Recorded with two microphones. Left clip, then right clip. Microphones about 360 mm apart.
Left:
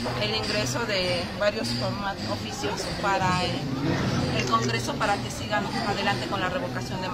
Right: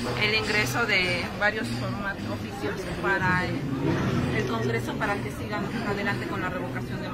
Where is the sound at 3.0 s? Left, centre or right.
Centre.